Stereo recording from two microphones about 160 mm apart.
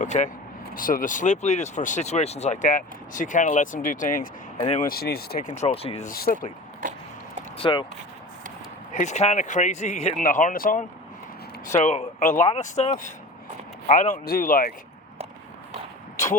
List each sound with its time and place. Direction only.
0.0 s speech: 50° left (ahead or behind)
0.7 s speech: 60° left (ahead or behind)
4.8 s speech: 70° left (ahead or behind)
5.4 s speech: 45° left (ahead or behind)
6.1 s speech: 65° left (ahead or behind)
7.6 s speech: 30° left (ahead or behind)
8.9 s speech: 50° left (ahead or behind)
11.6 s speech: 50° left (ahead or behind)
14.3 s speech: 60° left (ahead or behind)